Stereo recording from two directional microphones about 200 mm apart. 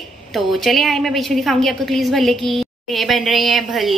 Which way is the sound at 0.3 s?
Centre (ahead or behind).